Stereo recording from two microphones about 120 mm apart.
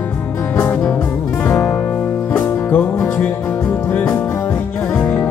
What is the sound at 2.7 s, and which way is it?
Music, 10° left (ahead or behind).